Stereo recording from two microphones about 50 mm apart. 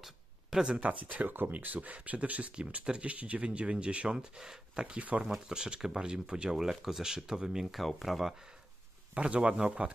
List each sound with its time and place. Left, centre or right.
0.0 s a sound: centre
0.7 s speech: right; by 7.6 s centre
7.7 s speech: centre
9.1 s speech: right